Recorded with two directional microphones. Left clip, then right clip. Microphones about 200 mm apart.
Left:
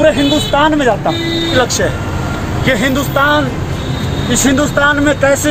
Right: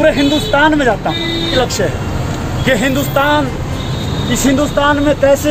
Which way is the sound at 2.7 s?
10° right (ahead or behind).